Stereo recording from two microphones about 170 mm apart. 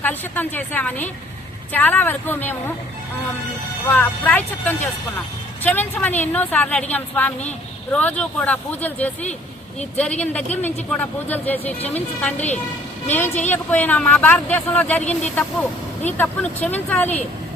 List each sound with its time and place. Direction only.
0.0 s speech: 10° left (ahead or behind)
3.8 s speech: 10° left (ahead or behind)